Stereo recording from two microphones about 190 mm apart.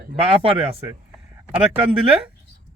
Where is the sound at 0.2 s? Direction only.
30° right (ahead or behind).